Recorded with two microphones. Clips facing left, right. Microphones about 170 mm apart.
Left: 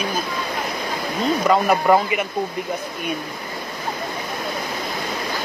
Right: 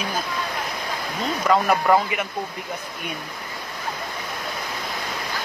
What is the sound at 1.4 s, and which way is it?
Speech, 15° left (ahead or behind).